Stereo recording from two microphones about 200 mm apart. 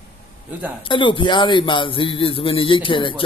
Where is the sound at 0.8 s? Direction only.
25° left (ahead or behind).